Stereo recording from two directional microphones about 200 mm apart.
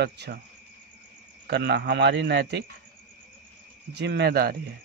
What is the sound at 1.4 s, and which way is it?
Speech, 55° right (ahead or behind).